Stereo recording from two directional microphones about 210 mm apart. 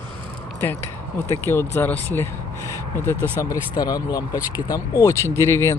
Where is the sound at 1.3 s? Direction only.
10° left (ahead or behind).